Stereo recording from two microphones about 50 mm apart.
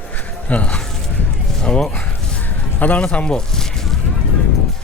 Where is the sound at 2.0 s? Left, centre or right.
Left.